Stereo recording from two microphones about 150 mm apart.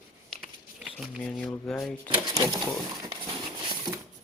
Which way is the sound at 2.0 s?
25° right (ahead or behind).